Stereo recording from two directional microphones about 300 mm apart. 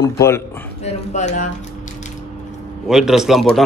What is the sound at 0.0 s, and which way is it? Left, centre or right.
Speech, centre.